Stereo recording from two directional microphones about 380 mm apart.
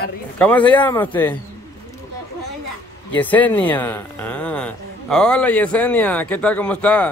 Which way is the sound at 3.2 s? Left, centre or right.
Centre.